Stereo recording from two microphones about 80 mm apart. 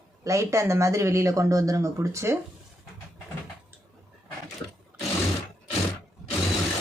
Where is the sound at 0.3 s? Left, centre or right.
Right.